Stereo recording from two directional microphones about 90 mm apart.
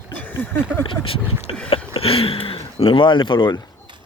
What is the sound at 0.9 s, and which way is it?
Speech, 90° left.